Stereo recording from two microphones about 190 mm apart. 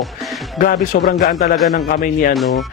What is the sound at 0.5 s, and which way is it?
A man's voice, 50° left (ahead or behind).